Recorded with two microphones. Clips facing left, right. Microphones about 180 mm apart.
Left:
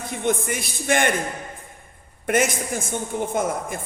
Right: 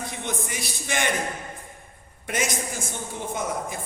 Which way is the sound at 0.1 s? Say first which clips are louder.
Left 8 dB; 55° left (ahead or behind).